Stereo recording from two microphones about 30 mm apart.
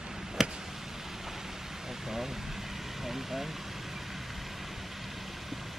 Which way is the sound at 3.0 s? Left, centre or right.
Centre.